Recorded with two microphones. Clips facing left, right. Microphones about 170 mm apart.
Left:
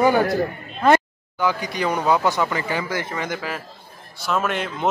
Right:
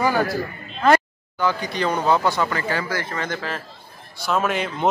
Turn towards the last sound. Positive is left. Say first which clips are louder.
# right 1 dB
turn(degrees=0)  # may be behind; listen again after turning